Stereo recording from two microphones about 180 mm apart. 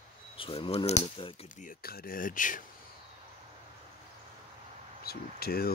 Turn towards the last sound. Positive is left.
turn(degrees=60)  # may be behind; listen again after turning